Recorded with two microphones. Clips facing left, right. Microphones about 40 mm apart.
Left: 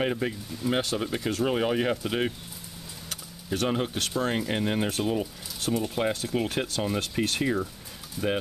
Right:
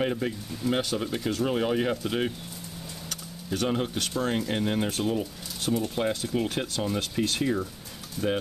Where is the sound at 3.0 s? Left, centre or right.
Left.